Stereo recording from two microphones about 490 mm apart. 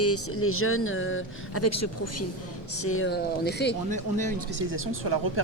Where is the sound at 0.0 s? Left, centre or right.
Left.